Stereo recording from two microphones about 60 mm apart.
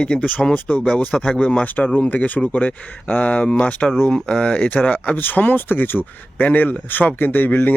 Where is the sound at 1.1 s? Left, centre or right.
Centre.